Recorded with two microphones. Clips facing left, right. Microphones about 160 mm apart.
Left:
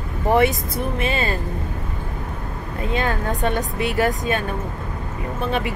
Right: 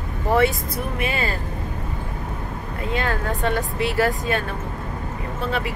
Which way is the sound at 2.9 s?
20° left (ahead or behind).